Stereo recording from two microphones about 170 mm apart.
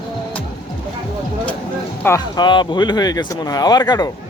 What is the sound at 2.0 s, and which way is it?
A man's voice, 20° left (ahead or behind).